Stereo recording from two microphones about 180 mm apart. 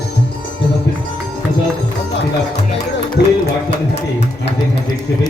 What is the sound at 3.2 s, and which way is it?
Music, 65° left (ahead or behind).